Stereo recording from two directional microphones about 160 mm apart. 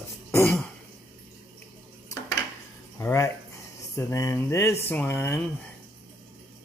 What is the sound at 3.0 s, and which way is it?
Speech, 15° left (ahead or behind).